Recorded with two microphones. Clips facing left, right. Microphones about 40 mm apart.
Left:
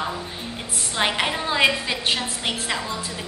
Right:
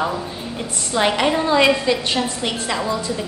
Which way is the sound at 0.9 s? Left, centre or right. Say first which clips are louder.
Right 5 dB; centre.